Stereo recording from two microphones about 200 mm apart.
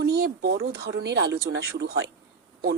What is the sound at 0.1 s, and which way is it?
A woman's voice, 55° right (ahead or behind).